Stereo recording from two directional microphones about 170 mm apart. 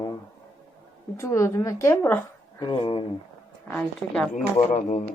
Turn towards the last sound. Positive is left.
turn(degrees=45)  # may be behind; listen again after turning